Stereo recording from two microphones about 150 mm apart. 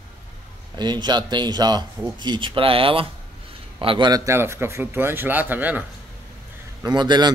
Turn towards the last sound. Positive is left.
turn(degrees=-30)  # may be behind; listen again after turning